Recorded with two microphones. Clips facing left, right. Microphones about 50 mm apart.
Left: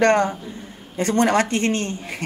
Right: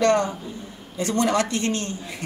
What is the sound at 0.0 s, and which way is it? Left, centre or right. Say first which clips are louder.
A woman's voice: left 3 dB; left.